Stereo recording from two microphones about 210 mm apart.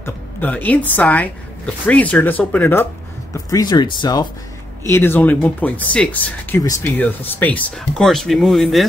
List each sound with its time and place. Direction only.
0.0 s a woman's voice: 10° left (ahead or behind)
4.9 s speech: 10° left (ahead or behind)